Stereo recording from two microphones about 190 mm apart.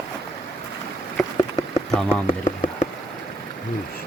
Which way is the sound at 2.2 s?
35° left (ahead or behind).